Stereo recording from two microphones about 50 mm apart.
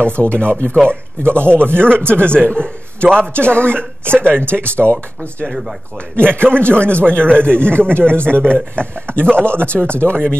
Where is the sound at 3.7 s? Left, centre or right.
Right.